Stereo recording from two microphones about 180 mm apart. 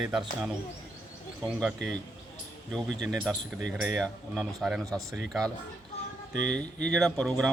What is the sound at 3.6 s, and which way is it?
Speech, 45° left (ahead or behind).